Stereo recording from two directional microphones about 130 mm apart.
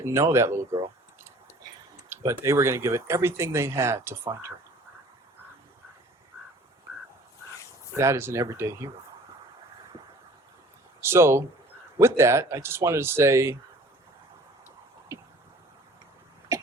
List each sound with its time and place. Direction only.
0.0 s a sound: 20° right (ahead or behind)
2.0 s speech: 20° right (ahead or behind)
7.9 s speech: 20° right (ahead or behind)
11.0 s speech: 20° right (ahead or behind)